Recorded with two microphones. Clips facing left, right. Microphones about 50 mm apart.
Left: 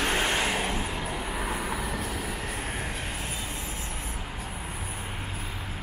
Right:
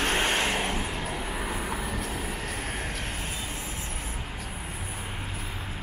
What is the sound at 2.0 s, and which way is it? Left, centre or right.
Vehicle, right.